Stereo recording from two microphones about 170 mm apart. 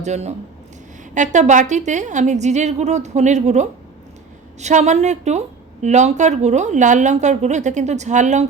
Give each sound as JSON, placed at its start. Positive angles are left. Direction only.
{"t": 0.0, "sound": "speech", "side_deg": -40}